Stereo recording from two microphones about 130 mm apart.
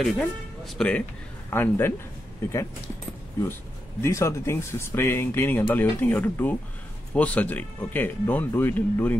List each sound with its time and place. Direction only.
0.0 s speech: centre (ahead or behind)
1.5 s speech: 15° left (ahead or behind)
4.0 s speech: 20° left (ahead or behind)